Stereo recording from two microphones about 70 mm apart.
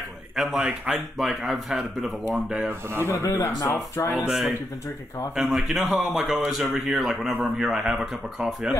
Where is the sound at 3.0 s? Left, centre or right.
Left.